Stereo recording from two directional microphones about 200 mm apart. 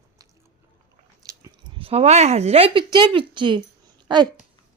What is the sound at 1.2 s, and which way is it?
A woman's voice, 20° right (ahead or behind).